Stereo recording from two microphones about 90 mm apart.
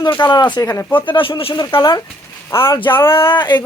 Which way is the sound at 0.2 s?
55° left (ahead or behind).